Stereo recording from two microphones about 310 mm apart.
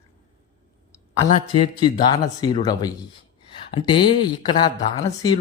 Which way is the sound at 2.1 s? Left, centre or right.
Centre.